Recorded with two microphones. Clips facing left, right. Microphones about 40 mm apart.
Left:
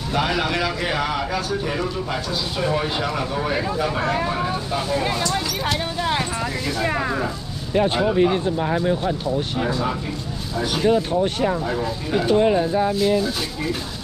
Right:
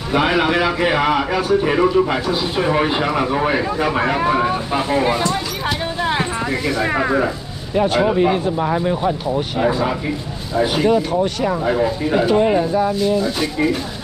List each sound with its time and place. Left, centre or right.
0.1 s a man's voice: right
5.3 s a sound: centre
6.8 s speech: centre
7.7 s speech: centre
8.2 s speech: centre
9.6 s a man's voice: right
12.3 s speech: centre
12.7 s speech: centre